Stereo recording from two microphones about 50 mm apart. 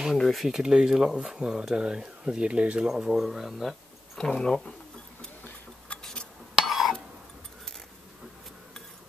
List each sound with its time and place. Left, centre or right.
0.2 s speech: centre
0.5 s speech: centre
2.9 s speech: centre
6.5 s a sound: centre